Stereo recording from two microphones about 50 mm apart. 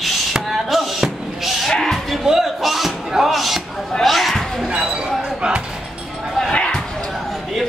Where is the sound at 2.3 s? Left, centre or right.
Centre.